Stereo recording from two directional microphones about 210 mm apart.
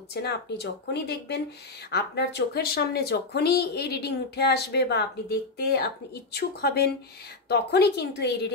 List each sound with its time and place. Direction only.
0.1 s speech: 50° left (ahead or behind)